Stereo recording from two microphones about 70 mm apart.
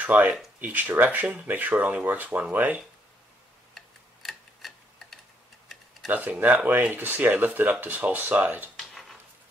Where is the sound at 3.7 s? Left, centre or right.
Centre.